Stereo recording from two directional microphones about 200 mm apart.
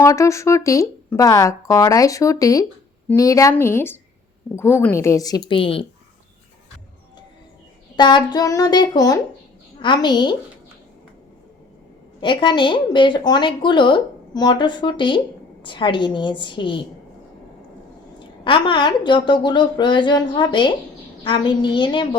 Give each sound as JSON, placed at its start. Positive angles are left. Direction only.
{"t": 0.0, "sound": "speech", "side_deg": 15}
{"t": 7.9, "sound": "speech", "side_deg": 20}
{"t": 12.2, "sound": "speech", "side_deg": 25}
{"t": 18.2, "sound": "speech", "side_deg": 25}